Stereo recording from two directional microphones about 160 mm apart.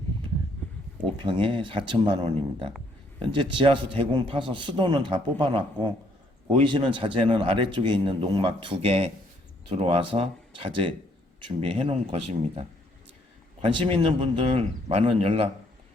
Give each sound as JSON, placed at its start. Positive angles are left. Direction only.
{"t": 1.2, "sound": "a man's voice", "side_deg": -30}